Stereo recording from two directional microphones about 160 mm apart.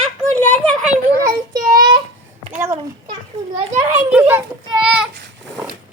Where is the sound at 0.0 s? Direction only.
5° left (ahead or behind).